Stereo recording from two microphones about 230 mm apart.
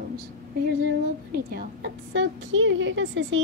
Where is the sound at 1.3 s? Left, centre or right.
Right.